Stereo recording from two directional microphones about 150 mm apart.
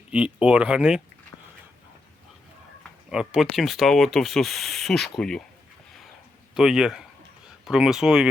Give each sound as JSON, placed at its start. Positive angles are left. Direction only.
{"t": 0.1, "sound": "speech", "side_deg": -5}
{"t": 3.1, "sound": "speech", "side_deg": -5}
{"t": 6.5, "sound": "speech", "side_deg": -5}